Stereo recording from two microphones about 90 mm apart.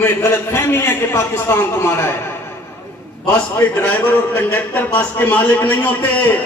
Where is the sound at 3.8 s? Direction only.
25° left (ahead or behind).